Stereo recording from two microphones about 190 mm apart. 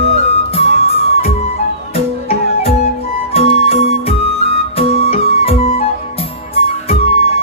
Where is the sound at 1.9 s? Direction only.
30° left (ahead or behind).